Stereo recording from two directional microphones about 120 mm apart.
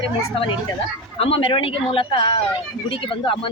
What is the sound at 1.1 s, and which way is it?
Speech, 55° left (ahead or behind).